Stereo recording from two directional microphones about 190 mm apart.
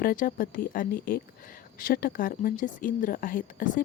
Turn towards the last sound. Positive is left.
turn(degrees=45)  # may be behind; listen again after turning